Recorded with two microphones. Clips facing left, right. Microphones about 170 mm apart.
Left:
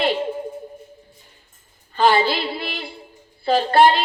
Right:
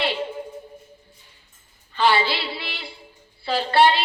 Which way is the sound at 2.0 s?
45° left (ahead or behind).